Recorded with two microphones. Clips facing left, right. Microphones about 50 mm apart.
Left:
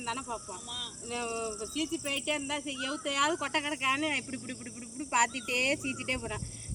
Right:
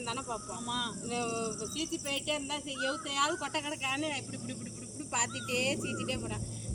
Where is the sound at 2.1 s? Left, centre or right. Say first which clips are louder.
Left 2 dB; left.